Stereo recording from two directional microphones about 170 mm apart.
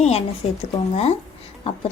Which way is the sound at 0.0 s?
40° left (ahead or behind).